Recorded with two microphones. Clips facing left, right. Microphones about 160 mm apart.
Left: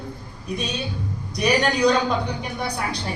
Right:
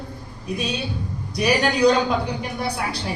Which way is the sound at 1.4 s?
5° right (ahead or behind).